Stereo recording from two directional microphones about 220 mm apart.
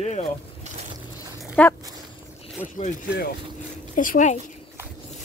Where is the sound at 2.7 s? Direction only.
40° left (ahead or behind).